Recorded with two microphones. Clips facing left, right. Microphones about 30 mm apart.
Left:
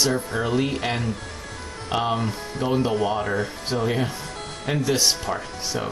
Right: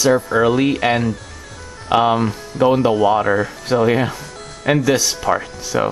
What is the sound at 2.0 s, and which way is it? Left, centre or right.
Speech, right.